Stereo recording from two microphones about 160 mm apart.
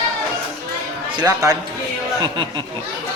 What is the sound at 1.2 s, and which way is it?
Speech, 20° right (ahead or behind).